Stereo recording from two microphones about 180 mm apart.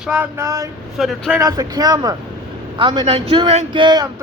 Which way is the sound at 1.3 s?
20° right (ahead or behind).